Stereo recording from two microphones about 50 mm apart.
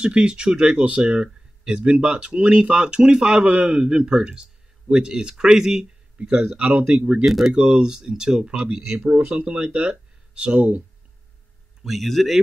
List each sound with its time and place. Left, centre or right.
0.0 s speech: centre
7.2 s speech: centre
7.5 s speech: centre
11.8 s speech: centre